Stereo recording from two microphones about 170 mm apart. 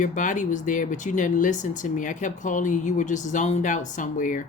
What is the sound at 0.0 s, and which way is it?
Speech, 50° left (ahead or behind).